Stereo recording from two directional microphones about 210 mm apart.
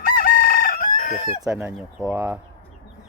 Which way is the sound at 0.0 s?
45° left (ahead or behind).